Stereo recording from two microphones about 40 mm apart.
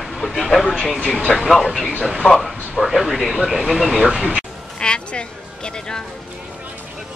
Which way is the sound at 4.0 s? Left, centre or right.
Centre.